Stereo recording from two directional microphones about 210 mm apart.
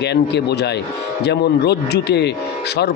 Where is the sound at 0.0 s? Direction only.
50° left (ahead or behind).